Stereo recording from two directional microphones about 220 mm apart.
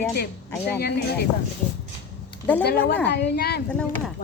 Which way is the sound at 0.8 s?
45° left (ahead or behind).